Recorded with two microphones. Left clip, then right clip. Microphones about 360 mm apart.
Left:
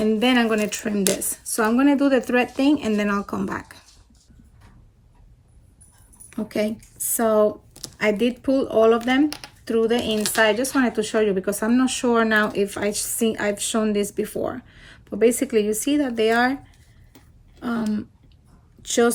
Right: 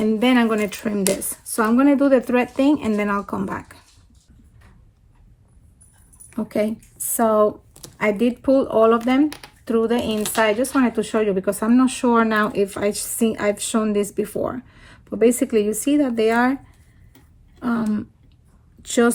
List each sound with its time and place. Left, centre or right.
0.0 s speech: centre
6.3 s speech: centre
16.0 s speech: right
17.6 s a woman's voice: centre